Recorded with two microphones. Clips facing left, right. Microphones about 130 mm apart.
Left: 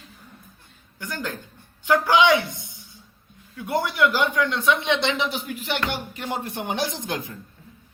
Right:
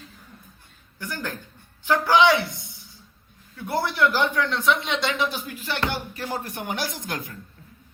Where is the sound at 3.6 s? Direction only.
15° left (ahead or behind).